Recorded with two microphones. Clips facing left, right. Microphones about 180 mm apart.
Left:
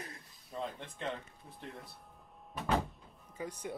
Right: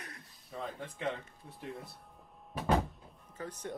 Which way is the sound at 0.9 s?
5° right (ahead or behind).